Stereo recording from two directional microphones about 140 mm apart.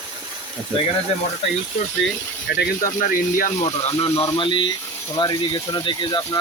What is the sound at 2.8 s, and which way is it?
Speech, 70° left (ahead or behind).